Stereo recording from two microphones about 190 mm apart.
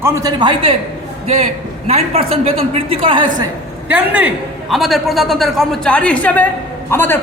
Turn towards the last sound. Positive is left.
turn(degrees=10)  # may be behind; listen again after turning